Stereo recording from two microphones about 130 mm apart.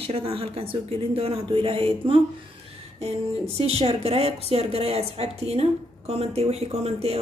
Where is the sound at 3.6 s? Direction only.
50° right (ahead or behind).